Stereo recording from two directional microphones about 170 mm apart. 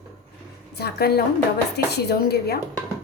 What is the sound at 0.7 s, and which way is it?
A woman's voice, 70° left (ahead or behind).